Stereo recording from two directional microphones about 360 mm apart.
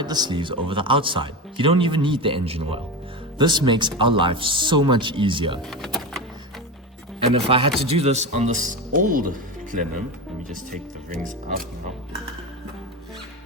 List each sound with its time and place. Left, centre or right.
0.0 s speech: centre
5.7 s speech: centre
7.3 s speech: centre